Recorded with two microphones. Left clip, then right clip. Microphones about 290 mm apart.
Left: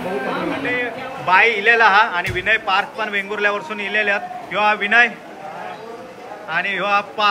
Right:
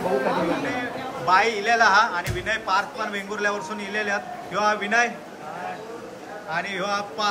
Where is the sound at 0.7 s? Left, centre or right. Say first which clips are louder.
Left 6 dB; centre.